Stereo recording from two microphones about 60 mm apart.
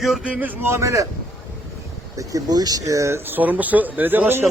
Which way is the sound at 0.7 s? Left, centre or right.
Right.